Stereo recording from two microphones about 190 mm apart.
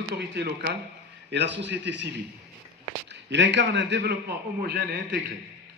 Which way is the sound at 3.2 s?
70° right (ahead or behind).